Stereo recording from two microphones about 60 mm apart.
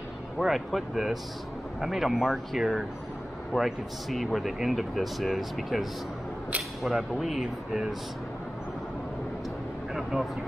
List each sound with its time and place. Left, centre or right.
0.4 s speech: centre
10.1 s speech: centre